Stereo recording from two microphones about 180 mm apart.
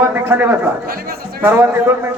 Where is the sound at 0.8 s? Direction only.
55° right (ahead or behind).